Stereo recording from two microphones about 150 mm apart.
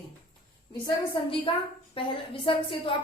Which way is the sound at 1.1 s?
35° left (ahead or behind).